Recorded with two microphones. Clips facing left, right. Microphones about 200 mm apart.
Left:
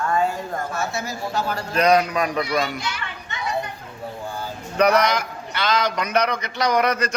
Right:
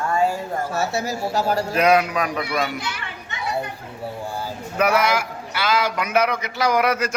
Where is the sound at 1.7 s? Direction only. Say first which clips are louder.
Left 2 dB; 5° right (ahead or behind).